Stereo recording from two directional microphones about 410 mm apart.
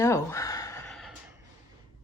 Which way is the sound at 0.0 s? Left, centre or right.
Centre.